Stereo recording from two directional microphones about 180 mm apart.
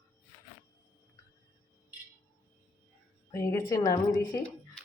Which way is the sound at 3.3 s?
15° left (ahead or behind).